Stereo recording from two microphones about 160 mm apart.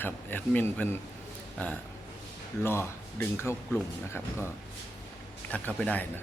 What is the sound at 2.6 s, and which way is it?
Speech, 15° left (ahead or behind).